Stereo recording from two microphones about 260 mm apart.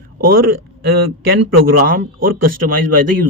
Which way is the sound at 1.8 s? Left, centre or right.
Right.